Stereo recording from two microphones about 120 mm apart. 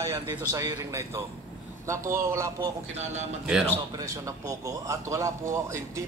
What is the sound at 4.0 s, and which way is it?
Speech, 25° right (ahead or behind).